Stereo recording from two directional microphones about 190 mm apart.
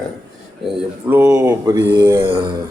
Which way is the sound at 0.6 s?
5° right (ahead or behind).